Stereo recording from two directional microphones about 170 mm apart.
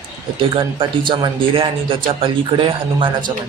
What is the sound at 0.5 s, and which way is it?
Speech, 30° right (ahead or behind).